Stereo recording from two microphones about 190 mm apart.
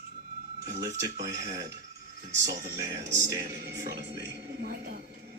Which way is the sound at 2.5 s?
55° right (ahead or behind).